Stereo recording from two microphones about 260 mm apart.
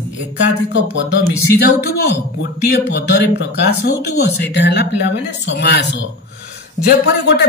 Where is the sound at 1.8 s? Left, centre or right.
Left.